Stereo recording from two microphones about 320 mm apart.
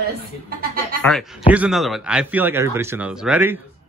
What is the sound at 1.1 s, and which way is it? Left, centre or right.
Speech, centre.